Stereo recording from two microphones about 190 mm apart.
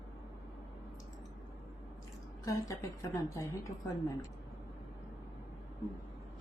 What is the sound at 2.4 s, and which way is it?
A woman's voice, 15° left (ahead or behind).